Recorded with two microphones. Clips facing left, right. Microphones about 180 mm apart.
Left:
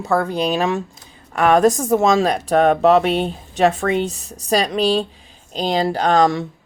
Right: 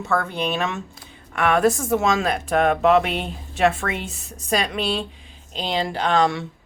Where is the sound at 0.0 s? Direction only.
35° left (ahead or behind).